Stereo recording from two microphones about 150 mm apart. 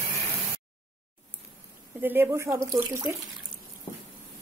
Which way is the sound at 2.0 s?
15° right (ahead or behind).